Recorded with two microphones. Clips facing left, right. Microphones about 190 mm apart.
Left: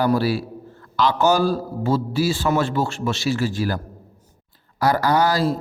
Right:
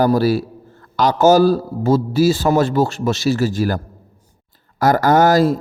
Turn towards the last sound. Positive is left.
turn(degrees=-45)  # may be behind; listen again after turning